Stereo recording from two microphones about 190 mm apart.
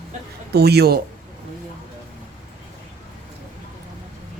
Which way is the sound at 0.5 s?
55° right (ahead or behind).